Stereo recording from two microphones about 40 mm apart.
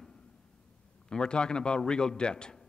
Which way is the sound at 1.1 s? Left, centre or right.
Left.